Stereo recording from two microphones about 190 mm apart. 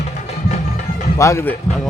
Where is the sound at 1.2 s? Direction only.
15° left (ahead or behind).